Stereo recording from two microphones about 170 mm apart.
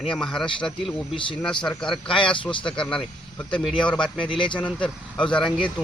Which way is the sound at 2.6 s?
5° left (ahead or behind).